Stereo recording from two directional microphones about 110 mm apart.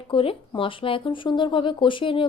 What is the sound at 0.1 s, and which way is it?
Speech, 55° left (ahead or behind).